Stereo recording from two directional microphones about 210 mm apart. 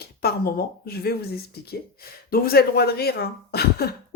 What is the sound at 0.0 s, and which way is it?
Speech, 50° left (ahead or behind).